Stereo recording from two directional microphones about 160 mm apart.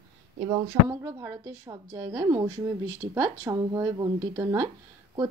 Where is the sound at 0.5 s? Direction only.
20° right (ahead or behind).